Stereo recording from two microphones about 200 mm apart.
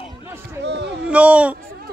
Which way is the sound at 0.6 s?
60° right (ahead or behind).